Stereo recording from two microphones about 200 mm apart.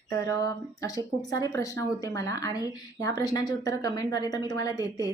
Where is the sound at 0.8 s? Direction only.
15° left (ahead or behind).